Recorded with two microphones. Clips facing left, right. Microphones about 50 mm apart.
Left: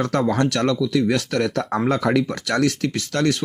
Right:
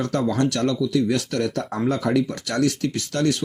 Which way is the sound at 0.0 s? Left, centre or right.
Left.